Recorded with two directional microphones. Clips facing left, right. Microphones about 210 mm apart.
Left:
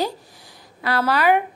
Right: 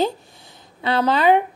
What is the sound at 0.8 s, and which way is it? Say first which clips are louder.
Speech: right 2 dB; 20° right (ahead or behind).